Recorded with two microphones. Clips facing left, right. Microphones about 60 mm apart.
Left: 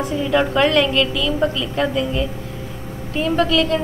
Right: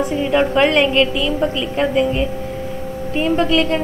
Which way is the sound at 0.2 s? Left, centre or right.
Right.